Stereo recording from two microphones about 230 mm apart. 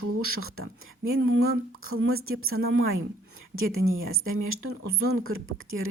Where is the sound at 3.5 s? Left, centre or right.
Right.